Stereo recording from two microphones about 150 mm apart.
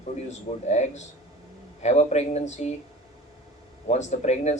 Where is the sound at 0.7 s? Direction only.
50° left (ahead or behind).